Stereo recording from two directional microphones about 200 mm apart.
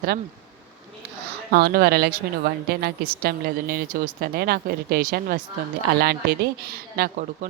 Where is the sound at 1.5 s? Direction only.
55° right (ahead or behind).